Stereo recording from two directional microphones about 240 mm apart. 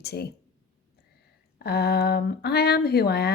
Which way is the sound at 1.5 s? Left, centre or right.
Left.